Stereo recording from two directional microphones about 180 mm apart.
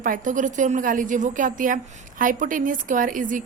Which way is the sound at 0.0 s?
45° right (ahead or behind).